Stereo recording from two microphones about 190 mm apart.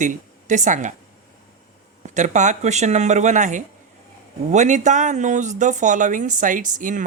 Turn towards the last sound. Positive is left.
turn(degrees=-45)  # may be behind; listen again after turning